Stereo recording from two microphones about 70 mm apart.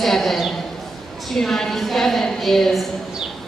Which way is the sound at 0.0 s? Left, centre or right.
Centre.